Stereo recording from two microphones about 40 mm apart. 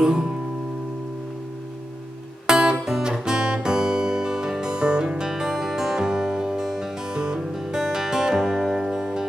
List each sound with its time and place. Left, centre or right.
0.0 s music: centre
2.4 s music: centre